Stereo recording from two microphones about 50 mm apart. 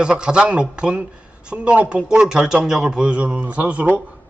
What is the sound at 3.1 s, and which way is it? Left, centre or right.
Speech, right.